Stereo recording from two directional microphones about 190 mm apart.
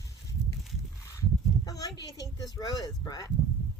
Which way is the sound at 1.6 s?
20° left (ahead or behind).